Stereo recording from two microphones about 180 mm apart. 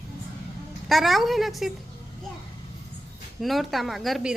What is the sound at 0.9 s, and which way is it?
Speech, centre (ahead or behind).